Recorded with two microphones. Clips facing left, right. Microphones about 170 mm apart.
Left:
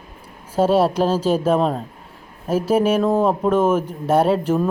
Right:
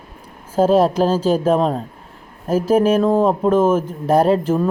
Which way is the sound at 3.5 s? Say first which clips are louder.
Right 2 dB; 30° right (ahead or behind).